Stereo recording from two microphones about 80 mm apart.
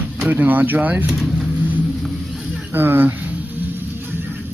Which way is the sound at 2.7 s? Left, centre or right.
Right.